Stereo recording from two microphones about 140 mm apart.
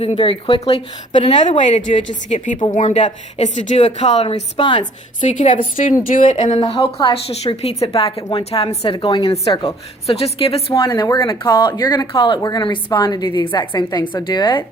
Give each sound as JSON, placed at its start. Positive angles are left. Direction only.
{"t": 0.0, "sound": "a woman's voice", "side_deg": 45}
{"t": 1.3, "sound": "a woman's voice", "side_deg": 60}
{"t": 5.2, "sound": "a woman's voice", "side_deg": 60}
{"t": 10.8, "sound": "a woman's voice", "side_deg": 30}